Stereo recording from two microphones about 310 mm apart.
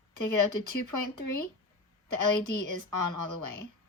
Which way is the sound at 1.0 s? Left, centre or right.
Left.